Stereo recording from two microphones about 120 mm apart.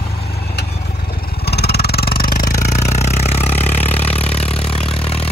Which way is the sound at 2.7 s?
70° left (ahead or behind).